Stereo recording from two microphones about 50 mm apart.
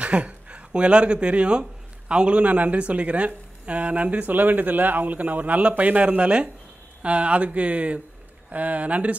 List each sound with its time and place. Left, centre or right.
0.0 s speech: right
2.4 s speech: right